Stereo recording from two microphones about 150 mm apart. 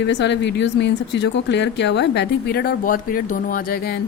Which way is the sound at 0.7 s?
90° left.